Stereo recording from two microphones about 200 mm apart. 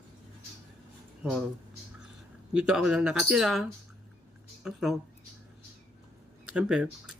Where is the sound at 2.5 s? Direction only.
5° right (ahead or behind).